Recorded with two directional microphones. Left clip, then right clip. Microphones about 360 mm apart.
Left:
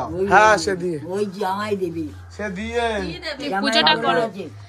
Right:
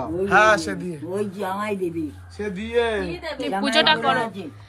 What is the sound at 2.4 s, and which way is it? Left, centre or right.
Speech, centre.